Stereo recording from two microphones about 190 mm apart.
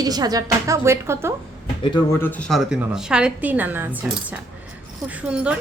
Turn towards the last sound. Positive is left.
turn(degrees=-5)  # may be behind; listen again after turning